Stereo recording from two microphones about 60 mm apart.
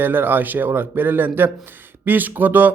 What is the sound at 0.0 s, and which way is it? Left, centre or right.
A man's voice, right.